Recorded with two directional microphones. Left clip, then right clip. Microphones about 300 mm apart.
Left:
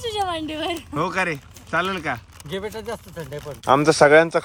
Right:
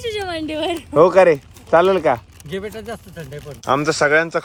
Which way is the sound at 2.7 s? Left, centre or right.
Left.